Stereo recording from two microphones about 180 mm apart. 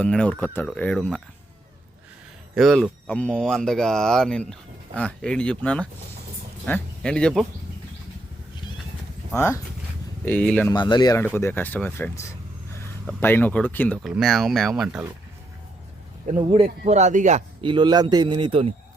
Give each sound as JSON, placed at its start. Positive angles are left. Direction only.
{"t": 0.0, "sound": "speech", "side_deg": 5}
{"t": 2.6, "sound": "speech", "side_deg": 0}
{"t": 9.3, "sound": "speech", "side_deg": 15}
{"t": 10.7, "sound": "speech", "side_deg": 25}
{"t": 11.3, "sound": "speech", "side_deg": 10}
{"t": 16.3, "sound": "speech", "side_deg": -35}
{"t": 17.6, "sound": "a man's voice", "side_deg": -25}